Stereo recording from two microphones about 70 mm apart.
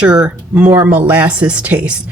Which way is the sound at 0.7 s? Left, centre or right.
Right.